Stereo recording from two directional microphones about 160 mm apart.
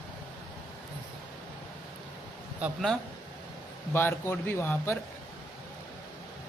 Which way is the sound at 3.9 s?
15° left (ahead or behind).